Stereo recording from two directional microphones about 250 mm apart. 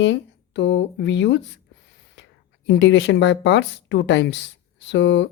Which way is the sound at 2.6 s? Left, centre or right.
Left.